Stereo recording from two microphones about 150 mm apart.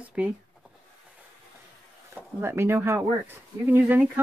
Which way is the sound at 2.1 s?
15° right (ahead or behind).